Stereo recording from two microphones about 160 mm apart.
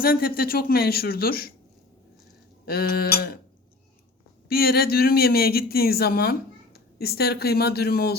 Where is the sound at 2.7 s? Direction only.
75° left (ahead or behind).